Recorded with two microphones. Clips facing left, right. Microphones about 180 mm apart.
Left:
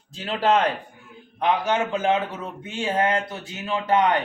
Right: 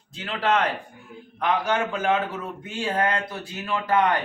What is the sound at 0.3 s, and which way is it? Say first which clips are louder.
A man's voice: left 3 dB; 30° left (ahead or behind).